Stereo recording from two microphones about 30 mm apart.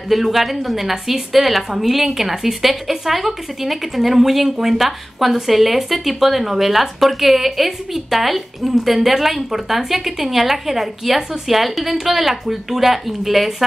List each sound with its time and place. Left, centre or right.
0.1 s a woman's voice: centre